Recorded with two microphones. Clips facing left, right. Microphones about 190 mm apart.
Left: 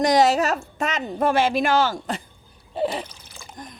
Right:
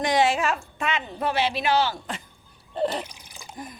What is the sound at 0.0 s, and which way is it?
A woman's voice, 40° left (ahead or behind).